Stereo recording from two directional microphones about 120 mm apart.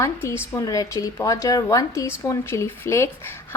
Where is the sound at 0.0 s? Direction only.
25° left (ahead or behind).